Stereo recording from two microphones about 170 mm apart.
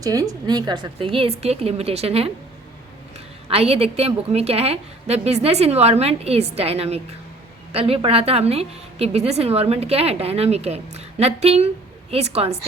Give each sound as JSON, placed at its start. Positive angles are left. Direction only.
{"t": 0.0, "sound": "a woman's voice", "side_deg": -20}
{"t": 3.5, "sound": "a woman's voice", "side_deg": -35}